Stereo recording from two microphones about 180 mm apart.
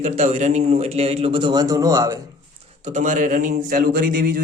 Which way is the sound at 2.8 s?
40° right (ahead or behind).